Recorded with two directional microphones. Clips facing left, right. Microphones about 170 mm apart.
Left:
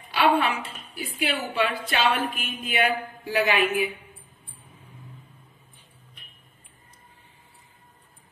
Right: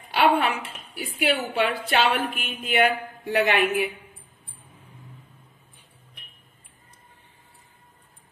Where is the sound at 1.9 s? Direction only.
60° right (ahead or behind).